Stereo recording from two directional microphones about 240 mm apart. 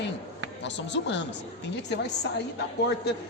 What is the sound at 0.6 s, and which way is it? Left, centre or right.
Speech, left.